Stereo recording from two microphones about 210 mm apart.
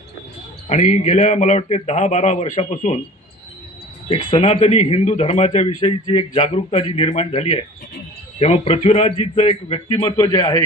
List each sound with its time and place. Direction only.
0.7 s a man's voice: 35° left (ahead or behind)
4.1 s a man's voice: 30° left (ahead or behind)